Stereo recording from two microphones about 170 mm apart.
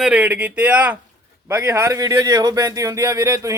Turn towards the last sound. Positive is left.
turn(degrees=-20)  # may be behind; listen again after turning